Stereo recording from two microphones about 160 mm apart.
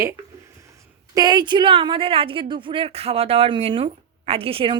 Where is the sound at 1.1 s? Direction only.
25° right (ahead or behind).